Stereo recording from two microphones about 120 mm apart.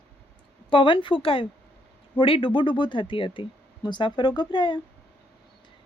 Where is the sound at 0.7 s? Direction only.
45° left (ahead or behind).